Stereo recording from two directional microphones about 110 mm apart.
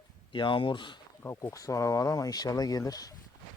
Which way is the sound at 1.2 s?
25° left (ahead or behind).